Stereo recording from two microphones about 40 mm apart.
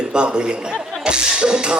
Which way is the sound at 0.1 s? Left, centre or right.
Right.